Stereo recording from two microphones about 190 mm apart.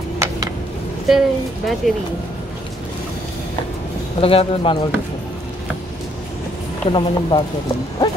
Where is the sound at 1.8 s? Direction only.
Centre (ahead or behind).